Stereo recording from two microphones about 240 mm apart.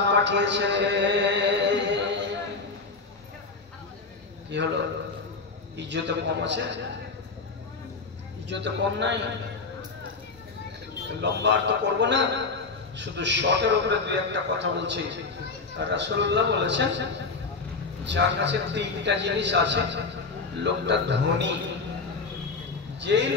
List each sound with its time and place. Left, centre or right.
0.0 s a man's voice: right
4.5 s a man's voice: right
5.8 s a man's voice: right
8.5 s a man's voice: right
11.1 s a man's voice: right
18.0 s a man's voice: right
22.9 s speech: right